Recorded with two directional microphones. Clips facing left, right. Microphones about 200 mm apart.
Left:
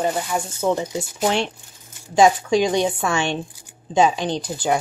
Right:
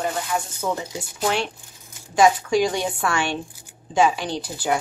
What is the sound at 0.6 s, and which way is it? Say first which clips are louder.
A woman's voice: left 5 dB; 25° left (ahead or behind).